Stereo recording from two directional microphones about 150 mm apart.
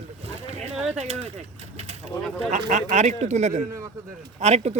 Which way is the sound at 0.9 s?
45° right (ahead or behind).